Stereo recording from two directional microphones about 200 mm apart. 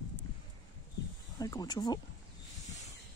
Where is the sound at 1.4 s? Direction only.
20° left (ahead or behind).